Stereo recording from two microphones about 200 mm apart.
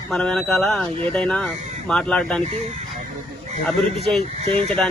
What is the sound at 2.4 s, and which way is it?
Speech, 35° right (ahead or behind).